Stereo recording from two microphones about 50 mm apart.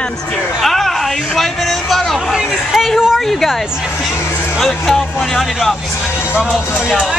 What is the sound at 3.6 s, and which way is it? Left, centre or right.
Speech, centre.